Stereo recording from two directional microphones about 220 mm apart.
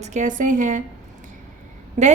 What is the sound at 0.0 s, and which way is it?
Speech, 30° right (ahead or behind).